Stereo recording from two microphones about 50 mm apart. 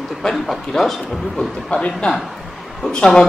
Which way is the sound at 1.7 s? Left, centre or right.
Left.